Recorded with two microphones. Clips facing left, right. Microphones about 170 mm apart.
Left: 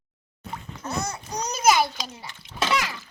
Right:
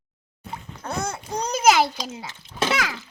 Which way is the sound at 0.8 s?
50° right (ahead or behind).